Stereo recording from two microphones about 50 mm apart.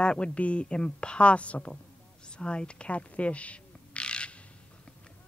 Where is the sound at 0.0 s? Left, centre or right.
Left.